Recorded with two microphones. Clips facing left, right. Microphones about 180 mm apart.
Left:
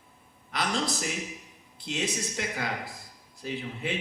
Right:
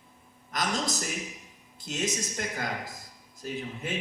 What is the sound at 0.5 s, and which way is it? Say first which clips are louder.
Speech: even; 45° right (ahead or behind).